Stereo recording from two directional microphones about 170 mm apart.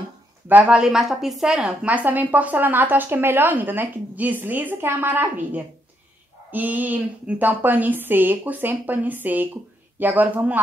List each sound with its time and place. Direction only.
0.5 s a woman's voice: 5° right (ahead or behind)